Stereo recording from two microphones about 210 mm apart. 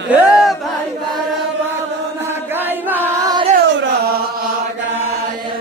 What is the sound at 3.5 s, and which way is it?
Music, 50° right (ahead or behind).